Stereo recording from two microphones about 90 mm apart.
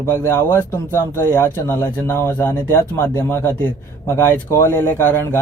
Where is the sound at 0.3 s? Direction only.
25° left (ahead or behind).